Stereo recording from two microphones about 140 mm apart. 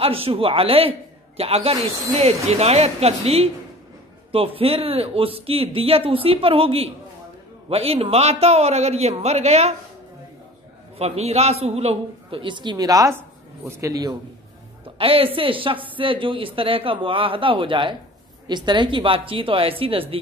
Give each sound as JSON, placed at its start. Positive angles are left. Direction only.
{"t": 0.0, "sound": "a man's voice", "side_deg": -45}
{"t": 4.6, "sound": "speech", "side_deg": -40}
{"t": 11.0, "sound": "a man's voice", "side_deg": -50}
{"t": 15.0, "sound": "speech", "side_deg": -40}